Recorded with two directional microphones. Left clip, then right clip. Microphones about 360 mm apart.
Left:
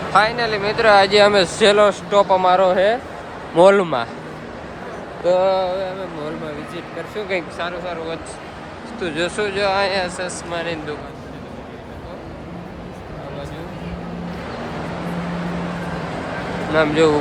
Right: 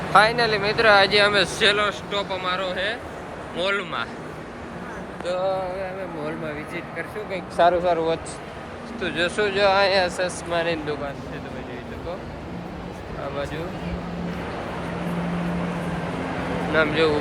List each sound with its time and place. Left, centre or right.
0.1 s speech: centre
5.2 s speech: centre
7.6 s speech: centre
16.7 s speech: centre